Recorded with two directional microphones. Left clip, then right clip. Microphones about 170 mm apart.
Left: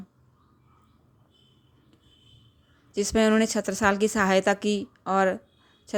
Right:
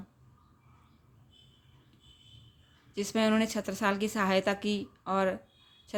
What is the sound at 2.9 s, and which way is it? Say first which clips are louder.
Speech: left 6 dB; 35° left (ahead or behind).